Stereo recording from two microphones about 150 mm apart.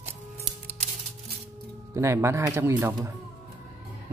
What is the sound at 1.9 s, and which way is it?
Speech, 20° right (ahead or behind).